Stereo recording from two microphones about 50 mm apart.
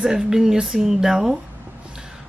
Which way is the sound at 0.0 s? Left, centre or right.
Centre.